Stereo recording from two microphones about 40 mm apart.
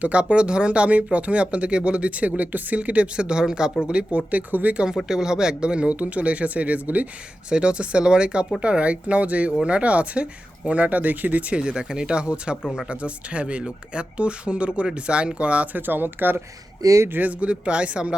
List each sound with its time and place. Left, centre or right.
0.0 s speech: right
4.3 s speech: right
5.0 s speech: centre; by 7.1 s right
7.5 s speech: right
11.5 s speech: right
15.7 s speech: right
17.1 s speech: right
17.4 s speech: right